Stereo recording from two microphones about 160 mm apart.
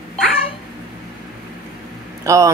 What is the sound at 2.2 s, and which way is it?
Speech, 20° right (ahead or behind).